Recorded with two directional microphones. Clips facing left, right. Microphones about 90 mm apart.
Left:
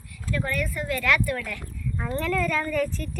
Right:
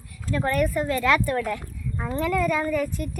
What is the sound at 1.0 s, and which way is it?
Speech, 25° right (ahead or behind).